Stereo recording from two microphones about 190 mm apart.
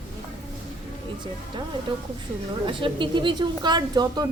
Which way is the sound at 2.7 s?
25° right (ahead or behind).